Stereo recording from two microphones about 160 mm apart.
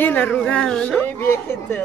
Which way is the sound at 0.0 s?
10° left (ahead or behind).